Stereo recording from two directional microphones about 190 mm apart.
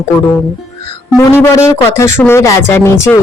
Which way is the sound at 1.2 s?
15° left (ahead or behind).